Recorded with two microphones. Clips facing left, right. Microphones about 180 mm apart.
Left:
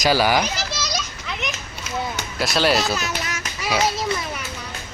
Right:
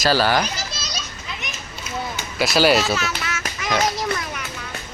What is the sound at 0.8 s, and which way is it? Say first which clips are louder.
Children playing: left 5 dB; 75° left (ahead or behind).